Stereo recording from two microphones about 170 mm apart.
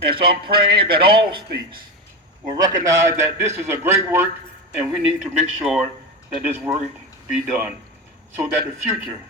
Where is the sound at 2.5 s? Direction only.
20° right (ahead or behind); by 5.8 s 5° right (ahead or behind).